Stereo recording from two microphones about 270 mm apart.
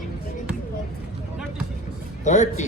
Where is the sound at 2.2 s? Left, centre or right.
Left.